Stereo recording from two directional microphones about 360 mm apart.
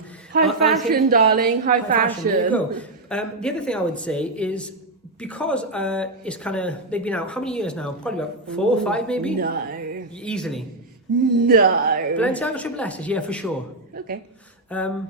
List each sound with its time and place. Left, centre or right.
0.4 s a sound: centre
1.1 s a woman's voice: right
2.5 s speech: centre
9.4 s a woman's voice: right
10.2 s speech: centre
11.3 s a woman's voice: right
12.1 s speech: centre
14.7 s speech: centre